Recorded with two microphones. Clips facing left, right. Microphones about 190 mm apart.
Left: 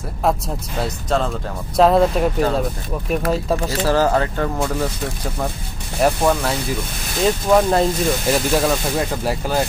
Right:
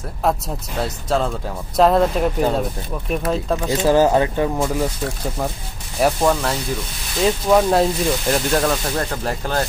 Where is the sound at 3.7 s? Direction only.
20° right (ahead or behind).